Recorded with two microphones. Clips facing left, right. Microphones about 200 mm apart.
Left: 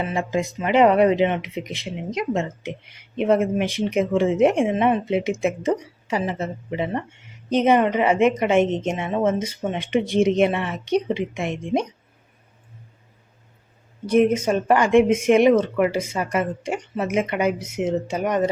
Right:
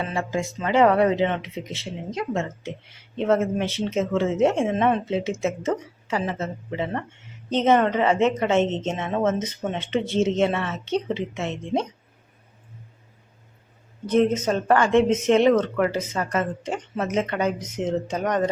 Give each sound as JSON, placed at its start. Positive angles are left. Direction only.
{"t": 0.1, "sound": "a woman's voice", "side_deg": 15}
{"t": 14.1, "sound": "a woman's voice", "side_deg": 10}